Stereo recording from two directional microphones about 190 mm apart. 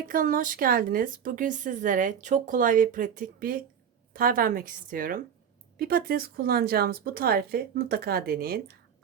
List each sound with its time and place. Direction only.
0.1 s a woman's voice: 45° right (ahead or behind)